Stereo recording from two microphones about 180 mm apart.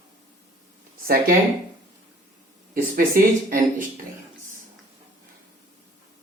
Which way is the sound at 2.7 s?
50° right (ahead or behind).